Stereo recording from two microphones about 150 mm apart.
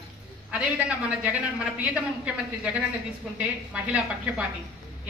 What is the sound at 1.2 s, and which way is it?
Speech, 10° right (ahead or behind).